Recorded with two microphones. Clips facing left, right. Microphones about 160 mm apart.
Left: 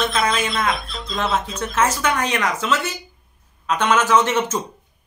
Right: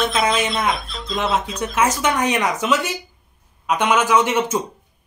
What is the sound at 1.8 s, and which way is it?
Speech, 10° right (ahead or behind).